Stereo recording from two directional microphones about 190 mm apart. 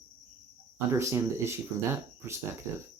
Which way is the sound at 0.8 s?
15° right (ahead or behind).